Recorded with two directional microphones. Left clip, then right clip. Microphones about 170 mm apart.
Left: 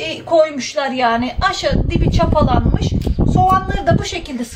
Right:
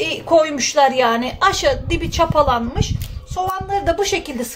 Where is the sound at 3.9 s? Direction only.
35° right (ahead or behind).